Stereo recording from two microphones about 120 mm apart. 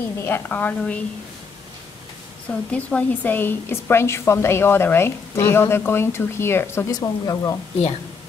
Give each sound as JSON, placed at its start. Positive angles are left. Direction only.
{"t": 0.2, "sound": "a woman's voice", "side_deg": 15}
{"t": 2.7, "sound": "a woman's voice", "side_deg": 10}